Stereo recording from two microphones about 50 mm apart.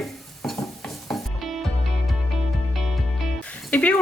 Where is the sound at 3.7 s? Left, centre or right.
Left.